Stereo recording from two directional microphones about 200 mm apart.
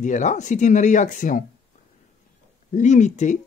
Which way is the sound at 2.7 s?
35° left (ahead or behind).